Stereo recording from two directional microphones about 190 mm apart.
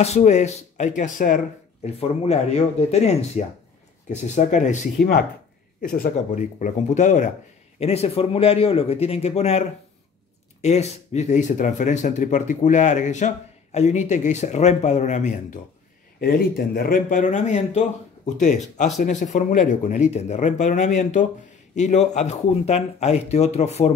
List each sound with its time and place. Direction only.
0.0 s speech: 35° left (ahead or behind)
2.0 s speech: 35° left (ahead or behind)
5.8 s speech: 50° left (ahead or behind)
16.2 s speech: 50° left (ahead or behind); by 23.9 s 35° left (ahead or behind)